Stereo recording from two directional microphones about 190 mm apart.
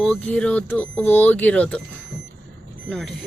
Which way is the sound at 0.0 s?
5° left (ahead or behind).